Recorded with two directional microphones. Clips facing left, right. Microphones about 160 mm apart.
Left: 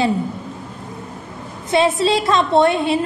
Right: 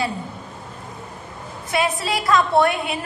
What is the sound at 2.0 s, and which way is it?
A woman's voice, 25° left (ahead or behind).